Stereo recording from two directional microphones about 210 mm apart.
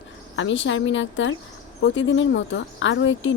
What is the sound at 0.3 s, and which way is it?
Speech, 60° left (ahead or behind).